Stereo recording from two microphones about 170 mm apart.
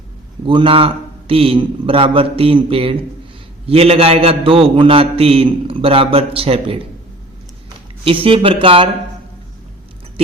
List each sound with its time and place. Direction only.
0.4 s a man's voice: 30° right (ahead or behind)
8.0 s a man's voice: 30° right (ahead or behind)